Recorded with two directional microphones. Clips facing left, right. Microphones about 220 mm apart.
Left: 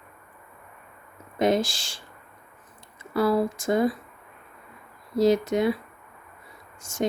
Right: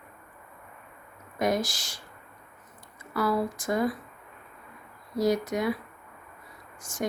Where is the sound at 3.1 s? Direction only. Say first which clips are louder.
Left 5 dB; 25° left (ahead or behind).